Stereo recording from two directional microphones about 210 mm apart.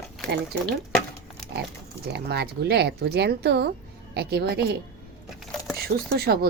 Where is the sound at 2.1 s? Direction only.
50° right (ahead or behind).